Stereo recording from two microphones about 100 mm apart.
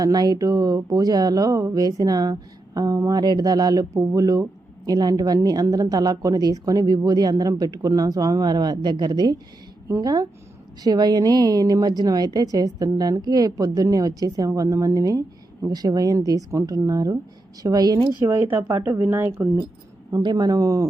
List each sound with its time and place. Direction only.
0.0 s a woman's voice: 40° right (ahead or behind)
18.2 s speech: 20° right (ahead or behind)
20.2 s a woman's voice: 40° right (ahead or behind)